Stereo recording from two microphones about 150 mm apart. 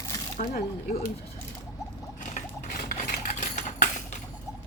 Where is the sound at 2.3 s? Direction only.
65° left (ahead or behind).